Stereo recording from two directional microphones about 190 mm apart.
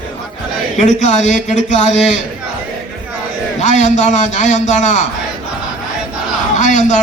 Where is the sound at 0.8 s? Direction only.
40° left (ahead or behind).